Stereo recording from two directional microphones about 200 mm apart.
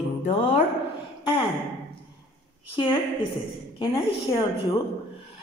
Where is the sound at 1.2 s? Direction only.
25° left (ahead or behind).